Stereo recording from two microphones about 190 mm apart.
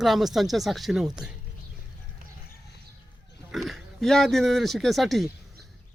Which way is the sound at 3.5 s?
Centre (ahead or behind).